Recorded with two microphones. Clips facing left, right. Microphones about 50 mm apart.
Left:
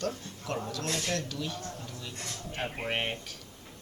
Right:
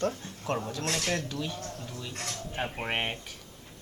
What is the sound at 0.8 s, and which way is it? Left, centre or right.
Speech, right.